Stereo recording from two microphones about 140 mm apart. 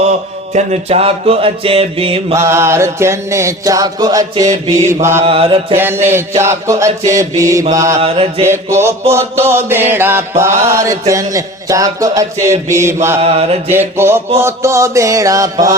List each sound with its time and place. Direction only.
0.5 s mantra: 50° right (ahead or behind)
2.3 s music: 20° right (ahead or behind)
5.2 s mantra: 40° right (ahead or behind)
5.7 s mantra: 15° right (ahead or behind)
6.4 s music: 20° right (ahead or behind)
8.0 s mantra: 45° right (ahead or behind)
8.4 s mantra: 20° right (ahead or behind)
9.9 s music: 15° right (ahead or behind)
13.2 s mantra: 45° right (ahead or behind)
13.7 s mantra: 15° right (ahead or behind)
14.3 s music: 20° right (ahead or behind)